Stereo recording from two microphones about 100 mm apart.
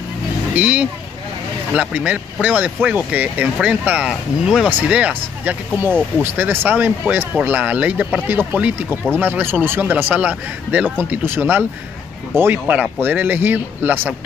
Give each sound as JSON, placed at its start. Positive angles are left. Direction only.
{"t": 0.6, "sound": "speech", "side_deg": -15}